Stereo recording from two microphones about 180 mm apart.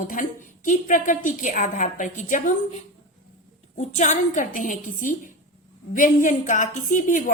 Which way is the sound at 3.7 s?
40° left (ahead or behind).